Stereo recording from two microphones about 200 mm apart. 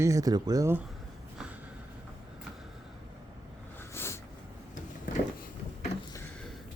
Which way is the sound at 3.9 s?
10° left (ahead or behind).